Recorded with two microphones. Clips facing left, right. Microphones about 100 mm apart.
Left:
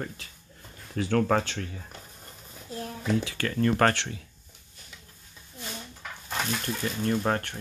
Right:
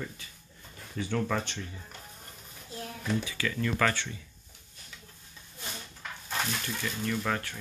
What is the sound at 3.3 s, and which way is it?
Speech, 45° left (ahead or behind).